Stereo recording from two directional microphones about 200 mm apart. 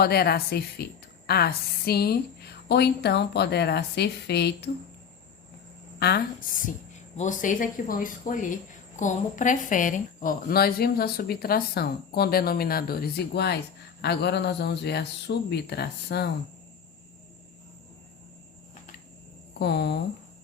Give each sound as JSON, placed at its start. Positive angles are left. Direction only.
{"t": 0.0, "sound": "a woman's voice", "side_deg": 50}
{"t": 6.0, "sound": "a woman's voice", "side_deg": 55}
{"t": 19.5, "sound": "a woman's voice", "side_deg": 55}